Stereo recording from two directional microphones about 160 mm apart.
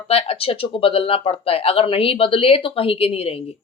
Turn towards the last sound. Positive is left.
turn(degrees=40)  # may be behind; listen again after turning